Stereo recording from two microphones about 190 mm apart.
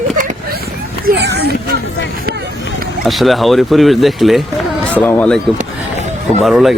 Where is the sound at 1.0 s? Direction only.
60° right (ahead or behind).